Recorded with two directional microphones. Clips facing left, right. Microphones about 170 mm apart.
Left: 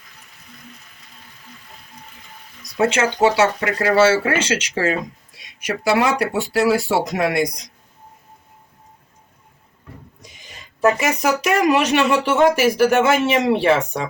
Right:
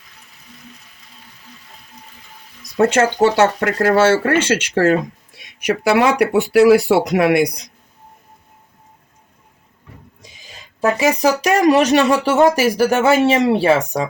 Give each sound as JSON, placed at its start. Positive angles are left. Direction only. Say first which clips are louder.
{"t": 2.7, "sound": "speech", "louder": "right 4 dB", "side_deg": -50}
{"t": 10.8, "sound": "speech", "louder": "right 2 dB", "side_deg": -30}